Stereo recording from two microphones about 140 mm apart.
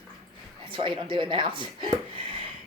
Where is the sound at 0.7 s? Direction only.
35° right (ahead or behind).